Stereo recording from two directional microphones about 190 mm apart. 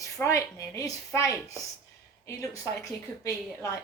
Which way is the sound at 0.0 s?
15° left (ahead or behind).